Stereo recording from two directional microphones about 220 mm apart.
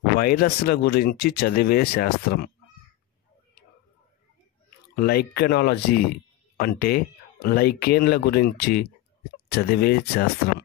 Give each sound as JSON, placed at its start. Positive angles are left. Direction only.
{"t": 0.2, "sound": "speech", "side_deg": 40}
{"t": 4.9, "sound": "speech", "side_deg": 45}